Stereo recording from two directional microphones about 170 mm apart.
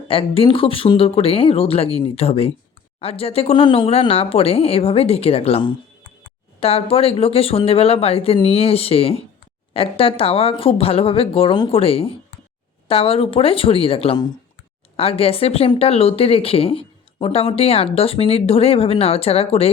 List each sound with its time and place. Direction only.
0.1 s speech: 35° left (ahead or behind)